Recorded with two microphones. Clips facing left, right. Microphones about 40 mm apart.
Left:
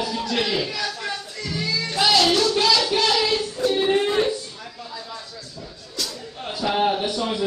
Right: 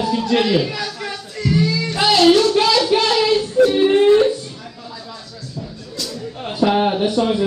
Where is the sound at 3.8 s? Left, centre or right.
Centre.